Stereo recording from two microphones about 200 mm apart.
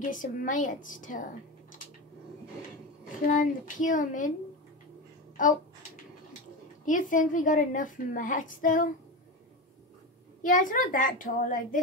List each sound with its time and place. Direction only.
0.0 s a woman's voice: 40° left (ahead or behind)
3.3 s a woman's voice: 40° left (ahead or behind)
5.4 s a woman's voice: 40° left (ahead or behind)
6.9 s a woman's voice: 40° left (ahead or behind)
10.4 s a woman's voice: 40° left (ahead or behind)